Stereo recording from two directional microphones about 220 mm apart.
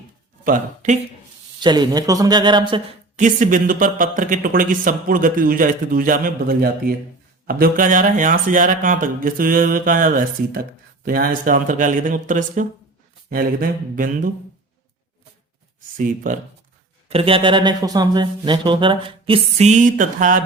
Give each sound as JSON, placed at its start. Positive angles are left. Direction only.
{"t": 0.4, "sound": "speech", "side_deg": -35}
{"t": 1.6, "sound": "speech", "side_deg": -20}
{"t": 3.2, "sound": "speech", "side_deg": -35}
{"t": 16.0, "sound": "speech", "side_deg": -35}
{"t": 17.1, "sound": "speech", "side_deg": -25}